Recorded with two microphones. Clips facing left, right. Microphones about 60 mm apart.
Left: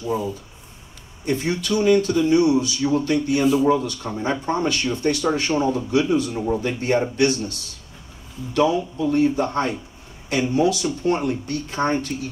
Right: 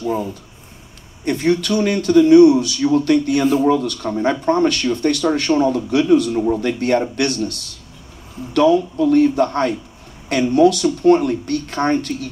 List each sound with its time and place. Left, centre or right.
0.0 s speech: right